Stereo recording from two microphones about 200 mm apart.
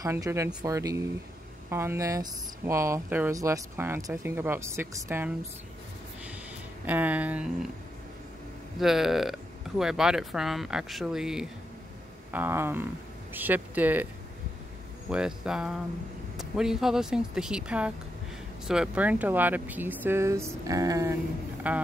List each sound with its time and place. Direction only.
0.0 s speech: 15° right (ahead or behind)
6.9 s speech: 10° right (ahead or behind)
8.7 s speech: centre (ahead or behind)
15.0 s speech: 5° right (ahead or behind)